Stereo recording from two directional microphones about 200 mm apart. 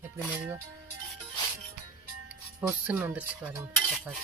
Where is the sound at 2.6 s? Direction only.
10° right (ahead or behind).